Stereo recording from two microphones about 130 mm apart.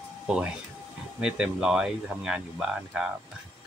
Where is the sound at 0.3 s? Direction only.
5° right (ahead or behind).